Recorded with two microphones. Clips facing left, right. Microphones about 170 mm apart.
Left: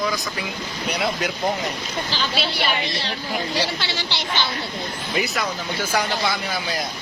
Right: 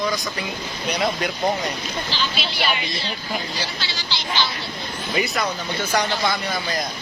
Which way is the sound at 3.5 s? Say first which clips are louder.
Left 5 dB; 60° left (ahead or behind).